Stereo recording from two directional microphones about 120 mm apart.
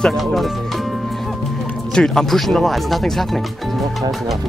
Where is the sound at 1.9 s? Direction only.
5° left (ahead or behind).